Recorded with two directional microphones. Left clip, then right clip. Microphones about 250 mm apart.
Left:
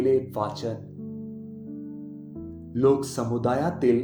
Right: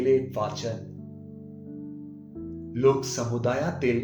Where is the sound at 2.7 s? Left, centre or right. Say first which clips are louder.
Left 1 dB; centre.